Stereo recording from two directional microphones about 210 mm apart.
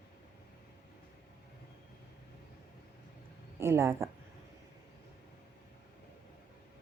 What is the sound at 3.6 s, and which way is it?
Speech, 10° right (ahead or behind).